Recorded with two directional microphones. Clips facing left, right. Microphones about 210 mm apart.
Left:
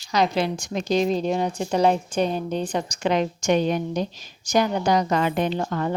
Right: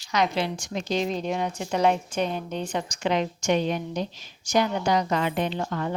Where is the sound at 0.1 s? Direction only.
40° left (ahead or behind).